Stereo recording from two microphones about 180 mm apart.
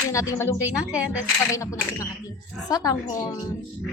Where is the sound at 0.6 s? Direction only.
10° right (ahead or behind).